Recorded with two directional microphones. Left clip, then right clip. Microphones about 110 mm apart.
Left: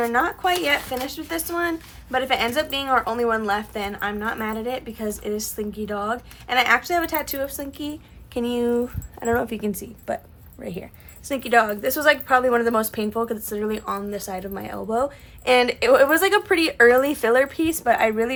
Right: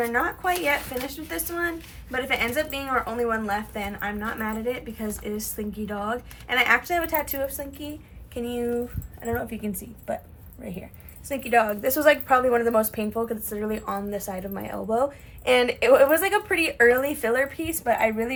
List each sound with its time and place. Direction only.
0.0 s a woman's voice: 35° left (ahead or behind)
9.2 s a woman's voice: 65° left (ahead or behind); by 10.8 s 50° left (ahead or behind)
11.3 s a woman's voice: 30° left (ahead or behind)
11.7 s a woman's voice: 20° left (ahead or behind)
15.4 s a woman's voice: 30° left (ahead or behind)